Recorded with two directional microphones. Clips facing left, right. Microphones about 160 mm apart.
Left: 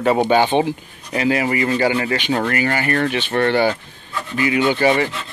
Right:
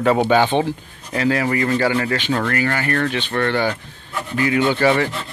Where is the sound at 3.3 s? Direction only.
25° left (ahead or behind).